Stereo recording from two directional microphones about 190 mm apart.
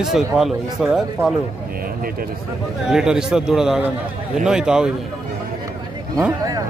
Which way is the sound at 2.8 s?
5° right (ahead or behind).